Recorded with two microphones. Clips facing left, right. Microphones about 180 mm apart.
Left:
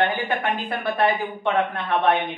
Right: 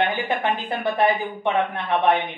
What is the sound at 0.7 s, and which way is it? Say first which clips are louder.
A man's voice: right 1 dB; 15° right (ahead or behind).